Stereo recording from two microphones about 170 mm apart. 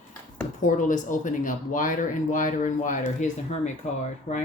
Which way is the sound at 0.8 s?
50° left (ahead or behind).